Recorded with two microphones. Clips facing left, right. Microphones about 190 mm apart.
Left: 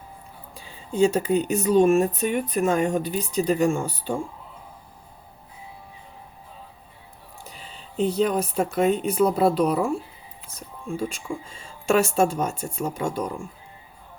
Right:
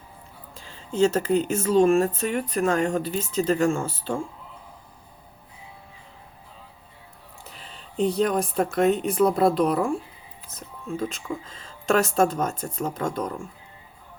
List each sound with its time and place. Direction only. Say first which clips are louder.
0.5 s a sound: left 1 dB; 15° left (ahead or behind)
0.9 s speech: even; 15° left (ahead or behind)
1.7 s speech: left 1 dB; 5° left (ahead or behind)
2.0 s speech: left 1 dB; 15° left (ahead or behind)
7.9 s speech: even; 5° left (ahead or behind)